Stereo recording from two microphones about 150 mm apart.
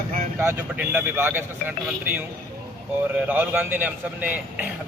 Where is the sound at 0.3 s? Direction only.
15° right (ahead or behind).